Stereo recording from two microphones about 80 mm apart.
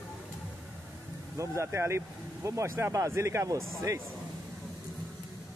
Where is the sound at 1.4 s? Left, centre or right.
Right.